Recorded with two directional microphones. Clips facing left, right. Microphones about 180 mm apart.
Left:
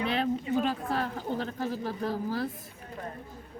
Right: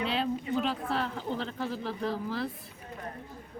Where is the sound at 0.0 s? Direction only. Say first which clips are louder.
Left 2 dB; 55° left (ahead or behind).